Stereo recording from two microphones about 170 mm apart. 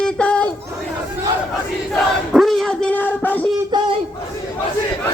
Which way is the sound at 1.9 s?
Centre (ahead or behind).